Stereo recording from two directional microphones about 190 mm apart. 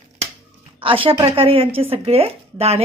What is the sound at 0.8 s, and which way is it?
Speech, 25° right (ahead or behind).